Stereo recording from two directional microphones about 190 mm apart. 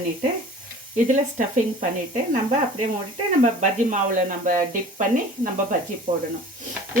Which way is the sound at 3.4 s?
40° right (ahead or behind).